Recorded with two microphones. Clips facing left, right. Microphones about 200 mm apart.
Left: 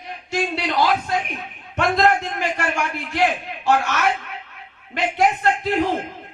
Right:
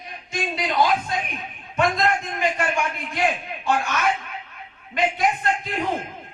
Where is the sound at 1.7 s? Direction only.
75° left (ahead or behind).